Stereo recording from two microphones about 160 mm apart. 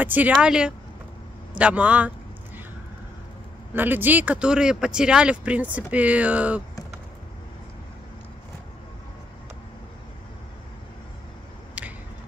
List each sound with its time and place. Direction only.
0.0 s speech: 10° right (ahead or behind)
1.6 s a sound: 10° right (ahead or behind)
3.7 s speech: 10° right (ahead or behind)